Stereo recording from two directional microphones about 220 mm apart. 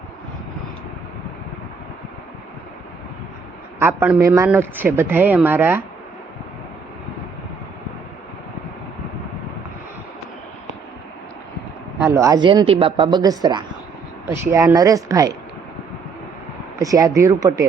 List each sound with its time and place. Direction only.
3.8 s speech: 10° right (ahead or behind)
12.0 s speech: 15° right (ahead or behind)
16.7 s speech: 15° right (ahead or behind)